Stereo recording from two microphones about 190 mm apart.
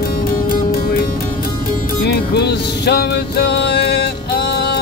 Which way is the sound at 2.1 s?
60° left (ahead or behind).